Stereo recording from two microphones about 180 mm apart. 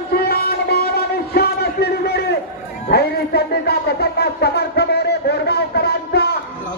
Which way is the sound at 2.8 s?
60° left (ahead or behind).